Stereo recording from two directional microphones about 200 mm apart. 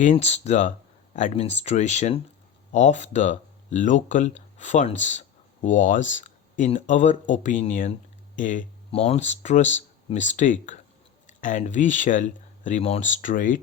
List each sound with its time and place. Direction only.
0.0 s speech: 35° left (ahead or behind)